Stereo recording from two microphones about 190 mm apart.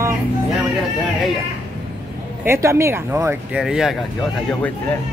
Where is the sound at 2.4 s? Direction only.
15° right (ahead or behind).